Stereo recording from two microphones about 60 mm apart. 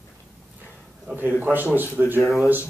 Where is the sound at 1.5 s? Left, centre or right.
Right.